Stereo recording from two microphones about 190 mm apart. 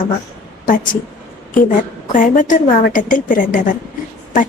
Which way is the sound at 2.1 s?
45° left (ahead or behind).